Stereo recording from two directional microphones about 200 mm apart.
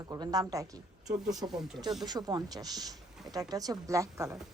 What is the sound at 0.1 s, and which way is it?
A woman's voice, 20° right (ahead or behind).